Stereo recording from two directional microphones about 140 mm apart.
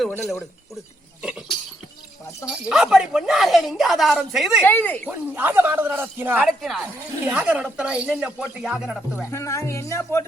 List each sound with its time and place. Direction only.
0.2 s speech: centre (ahead or behind)
1.2 s a sound: 5° right (ahead or behind)
2.6 s speech: 5° right (ahead or behind)
4.6 s speech: 15° left (ahead or behind)
5.0 s speech: 15° right (ahead or behind)
6.4 s speech: centre (ahead or behind)
9.3 s speech: 20° left (ahead or behind)